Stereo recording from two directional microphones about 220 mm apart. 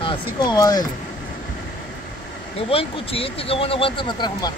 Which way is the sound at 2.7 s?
25° left (ahead or behind).